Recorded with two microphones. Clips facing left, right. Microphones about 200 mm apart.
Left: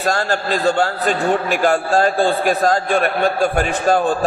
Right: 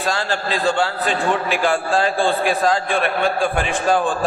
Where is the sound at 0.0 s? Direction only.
45° left (ahead or behind).